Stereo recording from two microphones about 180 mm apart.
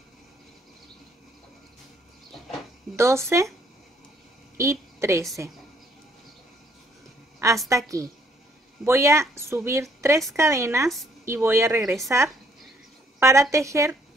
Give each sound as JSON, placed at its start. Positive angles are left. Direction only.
{"t": 3.0, "sound": "a woman's voice", "side_deg": -15}
{"t": 4.6, "sound": "a woman's voice", "side_deg": -15}
{"t": 7.4, "sound": "a woman's voice", "side_deg": -15}